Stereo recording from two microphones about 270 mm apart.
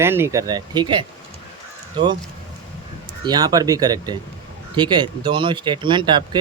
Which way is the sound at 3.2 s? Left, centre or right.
Centre.